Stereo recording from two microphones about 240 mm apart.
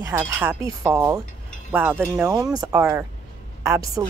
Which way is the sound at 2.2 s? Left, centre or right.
Centre.